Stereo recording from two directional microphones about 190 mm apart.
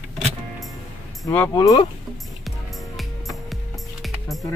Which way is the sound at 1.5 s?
20° left (ahead or behind).